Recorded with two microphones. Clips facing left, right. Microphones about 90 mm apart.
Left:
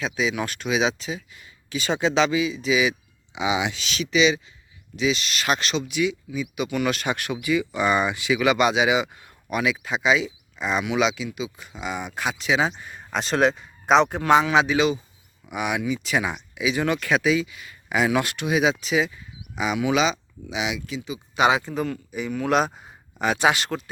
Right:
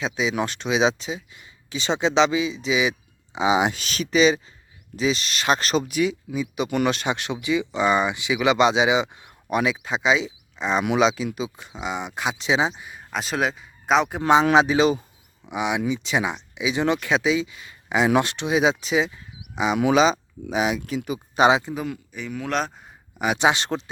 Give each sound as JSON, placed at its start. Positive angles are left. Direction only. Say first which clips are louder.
{"t": 0.0, "sound": "speech", "louder": "right 1 dB", "side_deg": -25}
{"t": 3.3, "sound": "speech", "louder": "right 4 dB", "side_deg": -35}
{"t": 6.8, "sound": "speech", "louder": "right 1 dB", "side_deg": -25}
{"t": 11.8, "sound": "speech", "louder": "right 1 dB", "side_deg": -20}
{"t": 12.7, "sound": "speech", "louder": "left 2 dB", "side_deg": -5}
{"t": 14.2, "sound": "speech", "louder": "even", "side_deg": -20}
{"t": 14.5, "sound": "speech", "louder": "right 2 dB", "side_deg": -35}
{"t": 15.4, "sound": "speech", "louder": "right 2 dB", "side_deg": -20}
{"t": 21.4, "sound": "speech", "louder": "right 2 dB", "side_deg": -20}
{"t": 22.1, "sound": "speech", "louder": "left 5 dB", "side_deg": 5}
{"t": 23.1, "sound": "speech", "louder": "even", "side_deg": -15}